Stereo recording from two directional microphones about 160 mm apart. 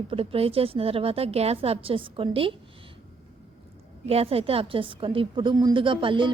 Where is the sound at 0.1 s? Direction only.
35° right (ahead or behind).